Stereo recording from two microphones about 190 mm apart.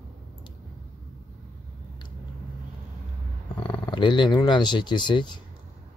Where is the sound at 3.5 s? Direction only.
25° left (ahead or behind).